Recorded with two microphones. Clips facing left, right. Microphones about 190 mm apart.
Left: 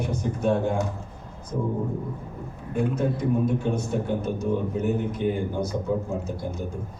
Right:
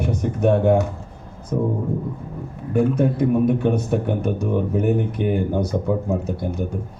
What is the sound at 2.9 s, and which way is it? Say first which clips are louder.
Speech: right 6 dB; 60° right (ahead or behind).